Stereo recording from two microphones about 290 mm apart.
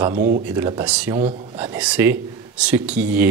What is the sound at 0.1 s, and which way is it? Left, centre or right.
Speech, right.